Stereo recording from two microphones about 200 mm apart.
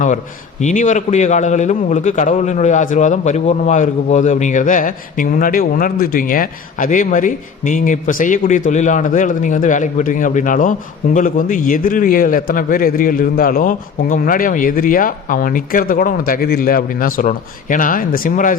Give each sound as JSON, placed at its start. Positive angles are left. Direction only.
{"t": 0.6, "sound": "a man's voice", "side_deg": 40}